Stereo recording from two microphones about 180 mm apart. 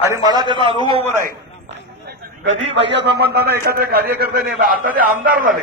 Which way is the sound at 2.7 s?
80° right.